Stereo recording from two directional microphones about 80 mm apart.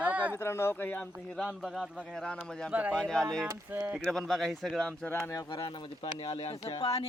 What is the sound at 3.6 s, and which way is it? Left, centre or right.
Speech, right.